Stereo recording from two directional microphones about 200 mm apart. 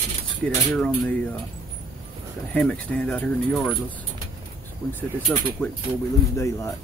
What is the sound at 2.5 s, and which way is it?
Speech, 5° left (ahead or behind).